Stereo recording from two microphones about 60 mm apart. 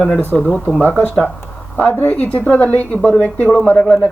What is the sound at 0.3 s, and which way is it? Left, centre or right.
Speech, left.